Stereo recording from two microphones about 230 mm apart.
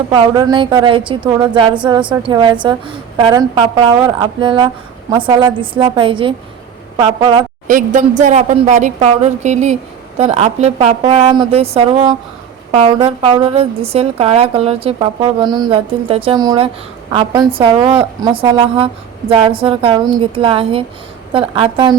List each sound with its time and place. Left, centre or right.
0.1 s a woman's voice: centre
7.7 s a woman's voice: right